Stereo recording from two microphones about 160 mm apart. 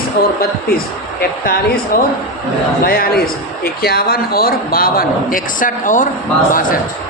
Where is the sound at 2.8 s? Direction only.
70° left (ahead or behind).